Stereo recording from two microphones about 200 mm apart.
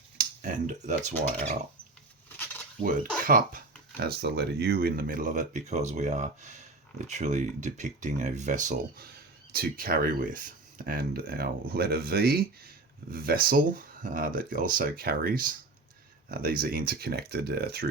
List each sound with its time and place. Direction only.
0.2 s speech: 40° right (ahead or behind)
2.4 s a sound: 10° left (ahead or behind)
3.2 s speech: 45° right (ahead or behind)